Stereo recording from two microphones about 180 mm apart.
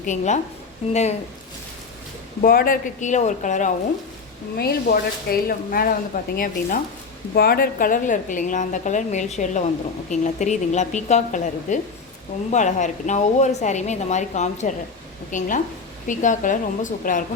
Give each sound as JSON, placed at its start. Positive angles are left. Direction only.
{"t": 0.0, "sound": "a woman's voice", "side_deg": 45}
{"t": 2.4, "sound": "a woman's voice", "side_deg": 55}
{"t": 4.5, "sound": "a woman's voice", "side_deg": 60}